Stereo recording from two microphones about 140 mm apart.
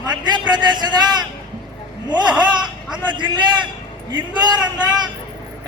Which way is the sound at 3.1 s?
30° right (ahead or behind).